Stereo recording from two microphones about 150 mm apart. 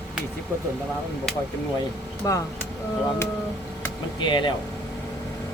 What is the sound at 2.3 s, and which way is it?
Speech, 25° left (ahead or behind).